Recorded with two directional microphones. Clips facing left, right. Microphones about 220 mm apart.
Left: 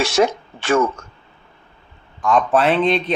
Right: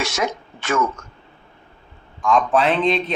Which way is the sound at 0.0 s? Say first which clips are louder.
Left 7 dB; 30° left (ahead or behind).